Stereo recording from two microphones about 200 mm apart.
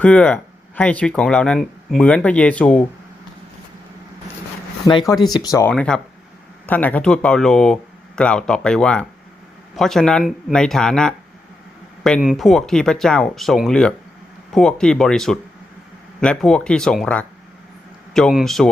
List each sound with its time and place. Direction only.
0.0 s speech: 5° left (ahead or behind)
4.9 s speech: 20° left (ahead or behind)
5.7 s speech: 5° left (ahead or behind)